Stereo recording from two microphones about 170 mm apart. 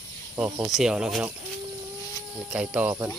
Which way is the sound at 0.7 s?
5° right (ahead or behind).